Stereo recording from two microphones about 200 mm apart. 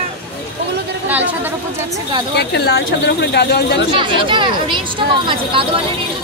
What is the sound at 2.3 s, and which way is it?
Speech, 55° left (ahead or behind).